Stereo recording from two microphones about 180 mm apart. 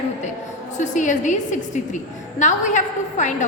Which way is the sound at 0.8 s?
45° left (ahead or behind).